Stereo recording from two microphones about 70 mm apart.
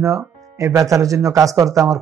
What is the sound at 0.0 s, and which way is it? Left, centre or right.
A man's voice, right.